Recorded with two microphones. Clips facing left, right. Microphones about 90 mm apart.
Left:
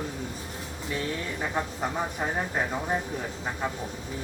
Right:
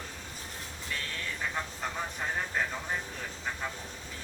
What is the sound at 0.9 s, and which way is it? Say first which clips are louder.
Speech: left 7 dB; 20° left (ahead or behind).